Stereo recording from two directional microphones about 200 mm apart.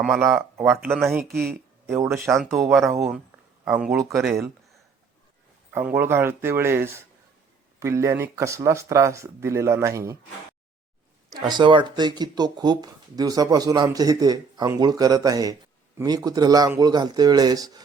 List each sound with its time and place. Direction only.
0.0 s speech: 5° right (ahead or behind)
2.4 s speech: centre (ahead or behind)
5.7 s speech: 10° right (ahead or behind)
11.3 s speech: 20° right (ahead or behind)